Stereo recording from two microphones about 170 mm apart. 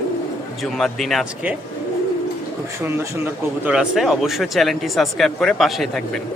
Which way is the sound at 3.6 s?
5° right (ahead or behind).